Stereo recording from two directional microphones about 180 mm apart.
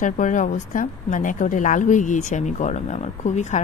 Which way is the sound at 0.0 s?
45° left (ahead or behind).